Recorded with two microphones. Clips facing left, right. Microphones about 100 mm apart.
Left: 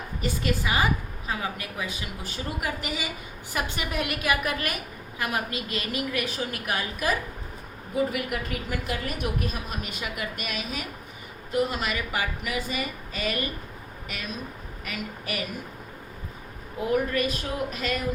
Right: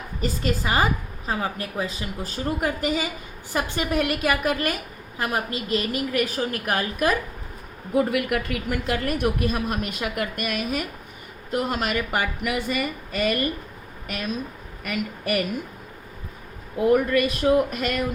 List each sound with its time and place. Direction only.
0.2 s a woman's voice: 35° right (ahead or behind)
7.9 s a woman's voice: 65° right (ahead or behind)
14.8 s speech: 55° right (ahead or behind)
16.9 s speech: 60° right (ahead or behind)